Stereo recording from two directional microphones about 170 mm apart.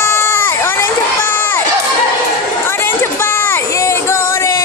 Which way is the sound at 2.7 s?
15° left (ahead or behind).